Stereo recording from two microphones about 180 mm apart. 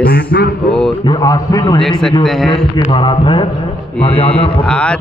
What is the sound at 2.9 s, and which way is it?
A man's voice, 25° left (ahead or behind).